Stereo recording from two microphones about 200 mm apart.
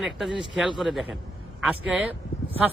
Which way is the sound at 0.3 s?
Centre (ahead or behind).